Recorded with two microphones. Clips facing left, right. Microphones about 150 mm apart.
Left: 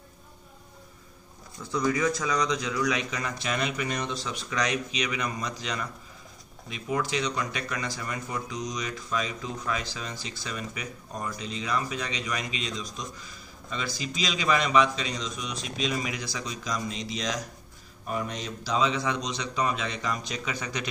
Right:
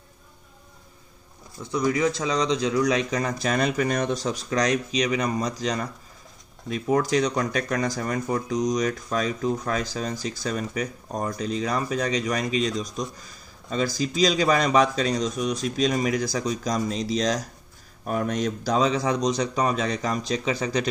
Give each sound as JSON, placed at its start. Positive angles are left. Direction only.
{"t": 1.6, "sound": "a man's voice", "side_deg": -20}
{"t": 18.0, "sound": "a man's voice", "side_deg": -50}